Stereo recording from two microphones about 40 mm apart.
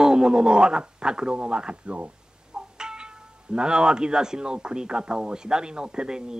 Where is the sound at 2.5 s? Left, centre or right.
Right.